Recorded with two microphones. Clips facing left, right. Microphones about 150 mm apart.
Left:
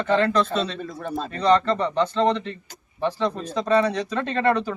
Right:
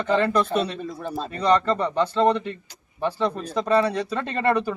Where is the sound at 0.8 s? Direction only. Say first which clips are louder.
Even; centre (ahead or behind).